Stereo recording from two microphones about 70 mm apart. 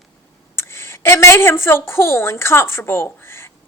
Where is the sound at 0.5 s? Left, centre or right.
Left.